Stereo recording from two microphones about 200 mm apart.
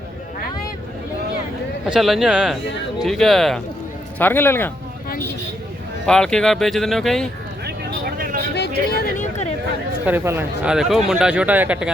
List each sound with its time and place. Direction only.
1.9 s speech: centre (ahead or behind)
6.1 s speech: 5° left (ahead or behind)
8.2 s vehicle: 45° right (ahead or behind)
8.5 s a sound: 55° left (ahead or behind); by 9.5 s 40° left (ahead or behind)
10.1 s speech: 10° right (ahead or behind)